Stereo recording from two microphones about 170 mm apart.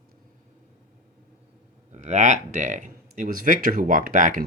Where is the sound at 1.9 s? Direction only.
45° right (ahead or behind).